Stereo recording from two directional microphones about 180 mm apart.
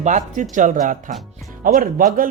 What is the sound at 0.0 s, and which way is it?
Speech, 40° right (ahead or behind).